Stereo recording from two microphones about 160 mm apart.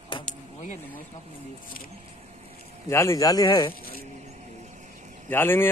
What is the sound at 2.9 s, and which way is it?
Speech, 20° left (ahead or behind).